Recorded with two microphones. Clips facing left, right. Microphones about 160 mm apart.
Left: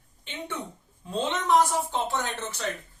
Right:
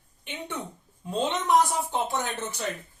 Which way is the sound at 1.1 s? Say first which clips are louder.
Even; 15° right (ahead or behind).